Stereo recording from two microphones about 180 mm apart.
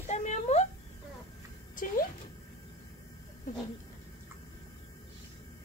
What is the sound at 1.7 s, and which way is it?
Speech, 50° left (ahead or behind).